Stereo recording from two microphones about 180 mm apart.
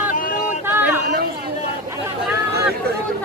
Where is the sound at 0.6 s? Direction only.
10° right (ahead or behind).